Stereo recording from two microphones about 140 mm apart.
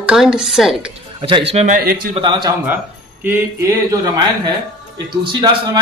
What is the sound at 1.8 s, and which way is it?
Speech, 90° right.